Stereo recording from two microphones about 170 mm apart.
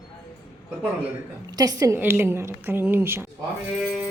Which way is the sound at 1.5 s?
20° right (ahead or behind).